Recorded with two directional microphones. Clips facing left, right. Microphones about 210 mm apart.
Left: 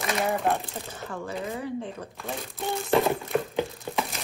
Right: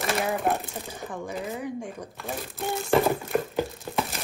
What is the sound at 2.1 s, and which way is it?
Crumpling, centre (ahead or behind).